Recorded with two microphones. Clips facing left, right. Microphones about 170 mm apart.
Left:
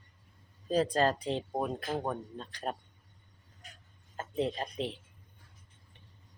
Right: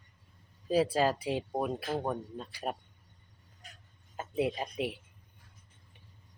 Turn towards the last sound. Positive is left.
turn(degrees=-10)  # may be behind; listen again after turning